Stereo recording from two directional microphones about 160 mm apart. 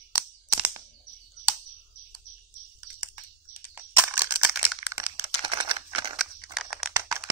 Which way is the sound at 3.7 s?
15° right (ahead or behind).